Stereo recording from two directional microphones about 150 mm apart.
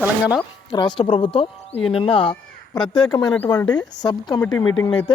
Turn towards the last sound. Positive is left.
turn(degrees=30)  # may be behind; listen again after turning